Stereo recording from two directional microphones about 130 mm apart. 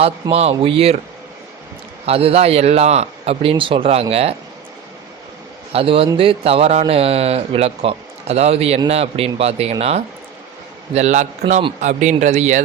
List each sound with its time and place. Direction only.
0.0 s speech: 50° right (ahead or behind)
2.0 s speech: 50° right (ahead or behind)
5.7 s speech: 45° right (ahead or behind)
10.9 s speech: 65° right (ahead or behind)